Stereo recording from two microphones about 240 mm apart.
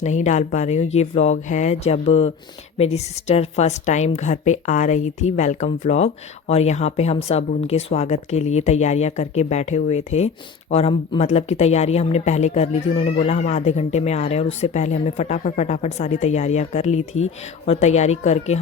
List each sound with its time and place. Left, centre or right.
0.0 s speech: left